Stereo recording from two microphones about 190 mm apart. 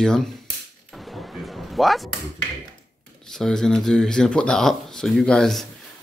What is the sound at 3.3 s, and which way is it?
Speech, 5° left (ahead or behind).